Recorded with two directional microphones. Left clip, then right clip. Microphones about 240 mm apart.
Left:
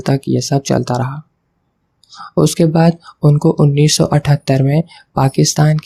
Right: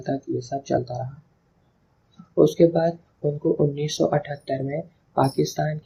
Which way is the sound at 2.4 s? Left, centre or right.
Left.